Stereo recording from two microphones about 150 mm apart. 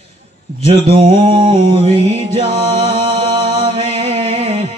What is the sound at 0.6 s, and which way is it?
Mantra, 35° right (ahead or behind).